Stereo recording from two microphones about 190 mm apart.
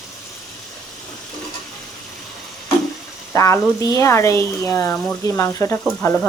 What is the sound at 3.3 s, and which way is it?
Speech, 15° left (ahead or behind).